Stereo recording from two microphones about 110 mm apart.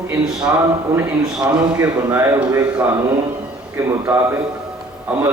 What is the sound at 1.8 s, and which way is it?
Speech, 25° right (ahead or behind).